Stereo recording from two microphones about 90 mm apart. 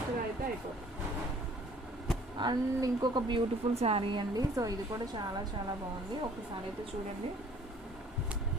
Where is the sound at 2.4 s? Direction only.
50° right (ahead or behind).